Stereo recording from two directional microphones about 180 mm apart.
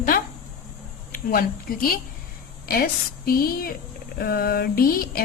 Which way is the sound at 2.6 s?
55° left (ahead or behind).